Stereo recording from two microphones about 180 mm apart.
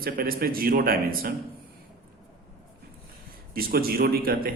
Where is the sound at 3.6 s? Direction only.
55° right (ahead or behind).